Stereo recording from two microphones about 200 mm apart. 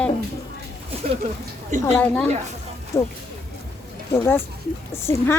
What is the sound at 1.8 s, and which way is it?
Speech, 10° left (ahead or behind).